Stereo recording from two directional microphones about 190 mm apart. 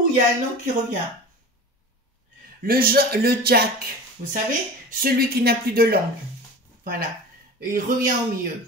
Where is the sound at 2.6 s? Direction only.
50° right (ahead or behind).